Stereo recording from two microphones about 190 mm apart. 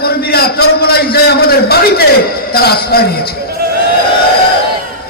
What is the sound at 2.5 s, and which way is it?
Speech, 55° left (ahead or behind).